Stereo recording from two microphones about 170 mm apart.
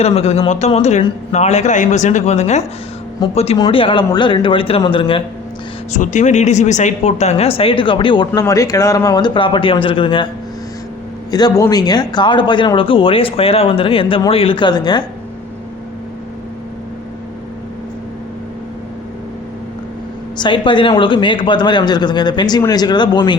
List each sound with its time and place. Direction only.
0.0 s a man's voice: 35° left (ahead or behind)
5.9 s a man's voice: 45° left (ahead or behind); by 10.2 s 30° left (ahead or behind)
11.3 s speech: 25° left (ahead or behind)
20.4 s speech: 30° left (ahead or behind)